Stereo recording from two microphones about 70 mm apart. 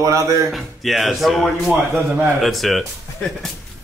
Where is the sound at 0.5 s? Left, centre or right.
Centre.